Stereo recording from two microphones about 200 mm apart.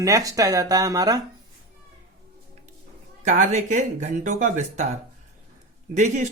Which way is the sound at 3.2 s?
35° right (ahead or behind).